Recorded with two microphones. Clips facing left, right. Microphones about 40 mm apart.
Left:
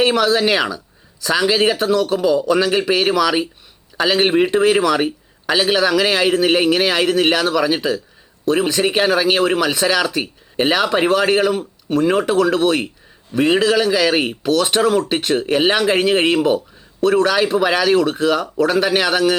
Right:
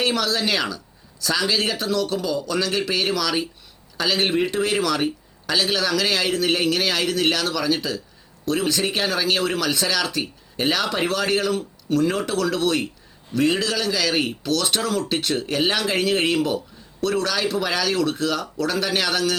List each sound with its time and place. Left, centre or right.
0.0 s speech: left